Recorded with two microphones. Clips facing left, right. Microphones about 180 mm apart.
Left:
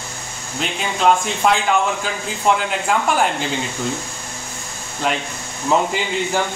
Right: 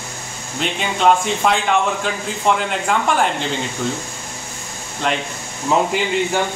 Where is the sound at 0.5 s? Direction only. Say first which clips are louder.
Right 2 dB; centre (ahead or behind).